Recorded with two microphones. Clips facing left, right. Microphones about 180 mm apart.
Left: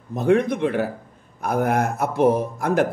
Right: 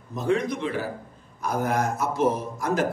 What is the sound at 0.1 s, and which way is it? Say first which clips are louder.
A man's voice: left 6 dB; 60° left (ahead or behind).